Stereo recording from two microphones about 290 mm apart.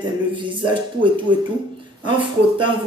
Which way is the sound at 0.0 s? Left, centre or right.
Centre.